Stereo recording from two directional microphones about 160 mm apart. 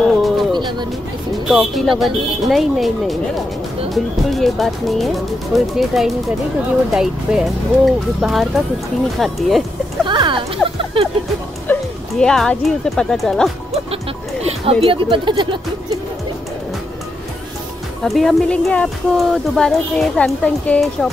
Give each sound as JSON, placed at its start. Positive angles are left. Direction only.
{"t": 0.0, "sound": "music", "side_deg": 0}
{"t": 0.5, "sound": "music", "side_deg": -30}
{"t": 1.5, "sound": "a woman's voice", "side_deg": 0}
{"t": 10.0, "sound": "a sound", "side_deg": -30}
{"t": 11.6, "sound": "speech", "side_deg": 10}
{"t": 14.4, "sound": "speech", "side_deg": -40}
{"t": 18.0, "sound": "a woman's voice", "side_deg": 0}